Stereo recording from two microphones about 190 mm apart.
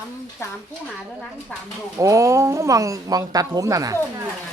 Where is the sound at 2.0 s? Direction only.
15° right (ahead or behind).